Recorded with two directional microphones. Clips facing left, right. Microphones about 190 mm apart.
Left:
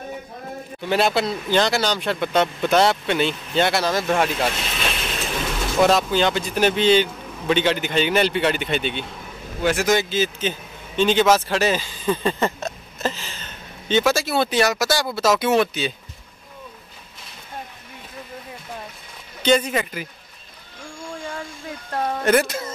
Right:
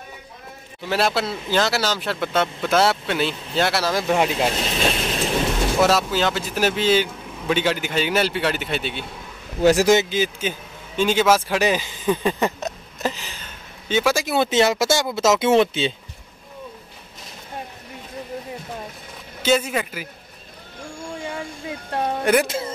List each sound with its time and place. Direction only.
0.8 s a man's voice: centre (ahead or behind); by 4.5 s 15° right (ahead or behind)
4.5 s speech: 35° right (ahead or behind)
5.8 s a man's voice: 5° right (ahead or behind)
9.6 s speech: 35° right (ahead or behind)
9.9 s a man's voice: 15° right (ahead or behind)
19.4 s a man's voice: 5° right (ahead or behind)
21.9 s a man's voice: 15° right (ahead or behind)